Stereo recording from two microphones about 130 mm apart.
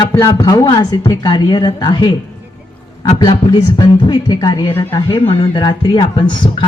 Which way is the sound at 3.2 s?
30° left (ahead or behind).